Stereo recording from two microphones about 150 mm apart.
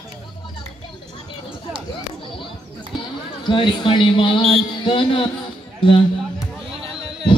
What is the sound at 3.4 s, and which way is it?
A man's voice, 35° left (ahead or behind).